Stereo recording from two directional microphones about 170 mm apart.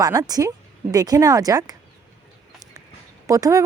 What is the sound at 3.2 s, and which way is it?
Speech, 20° right (ahead or behind).